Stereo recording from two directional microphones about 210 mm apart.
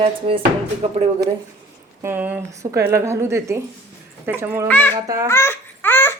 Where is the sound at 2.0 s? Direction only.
10° right (ahead or behind).